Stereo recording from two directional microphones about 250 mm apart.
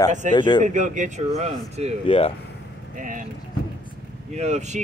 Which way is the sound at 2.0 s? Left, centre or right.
Left.